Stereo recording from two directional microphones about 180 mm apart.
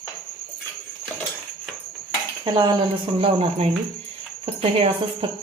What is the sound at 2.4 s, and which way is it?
A woman's voice, 25° right (ahead or behind).